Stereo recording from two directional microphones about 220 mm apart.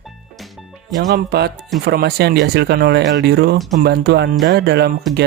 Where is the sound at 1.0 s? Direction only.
45° right (ahead or behind).